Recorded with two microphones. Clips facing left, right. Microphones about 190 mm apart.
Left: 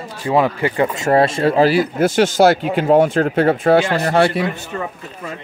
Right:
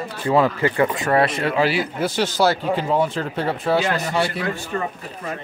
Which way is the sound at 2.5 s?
65° left (ahead or behind).